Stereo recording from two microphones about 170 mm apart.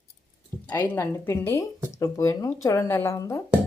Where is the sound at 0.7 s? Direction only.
15° left (ahead or behind).